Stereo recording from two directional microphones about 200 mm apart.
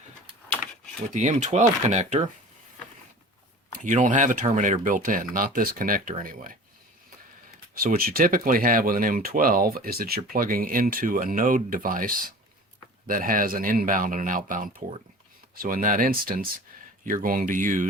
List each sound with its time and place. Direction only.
1.1 s speech: 35° right (ahead or behind)
3.8 s speech: 40° right (ahead or behind)
7.8 s speech: 45° right (ahead or behind)